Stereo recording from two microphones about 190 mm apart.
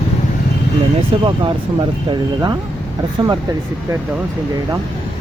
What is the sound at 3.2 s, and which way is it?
Speech, 25° right (ahead or behind).